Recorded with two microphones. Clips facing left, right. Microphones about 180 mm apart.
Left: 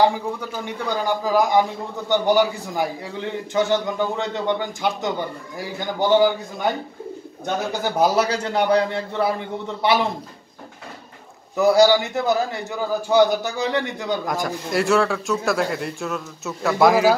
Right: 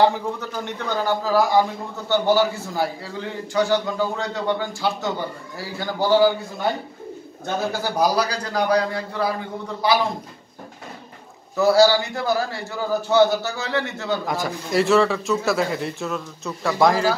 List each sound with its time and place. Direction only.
0.0 s a man's voice: 10° left (ahead or behind)
11.5 s a man's voice: 15° left (ahead or behind)
14.2 s a man's voice: centre (ahead or behind)